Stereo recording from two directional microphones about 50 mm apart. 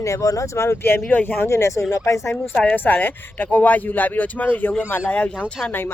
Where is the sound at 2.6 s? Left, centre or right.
Left.